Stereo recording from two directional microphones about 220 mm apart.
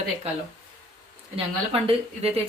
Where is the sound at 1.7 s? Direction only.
25° right (ahead or behind).